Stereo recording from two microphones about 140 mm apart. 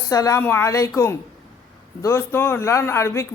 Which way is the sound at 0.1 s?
25° left (ahead or behind).